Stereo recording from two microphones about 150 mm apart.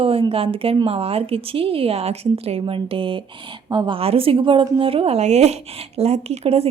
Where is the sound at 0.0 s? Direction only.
40° right (ahead or behind).